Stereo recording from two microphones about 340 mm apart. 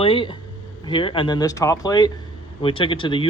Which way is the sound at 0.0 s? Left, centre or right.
Centre.